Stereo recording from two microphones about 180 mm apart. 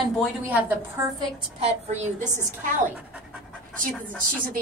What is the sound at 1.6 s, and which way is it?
A woman's voice, 40° right (ahead or behind).